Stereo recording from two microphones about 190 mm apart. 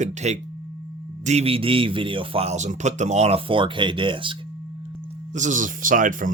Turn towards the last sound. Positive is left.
turn(degrees=-45)  # may be behind; listen again after turning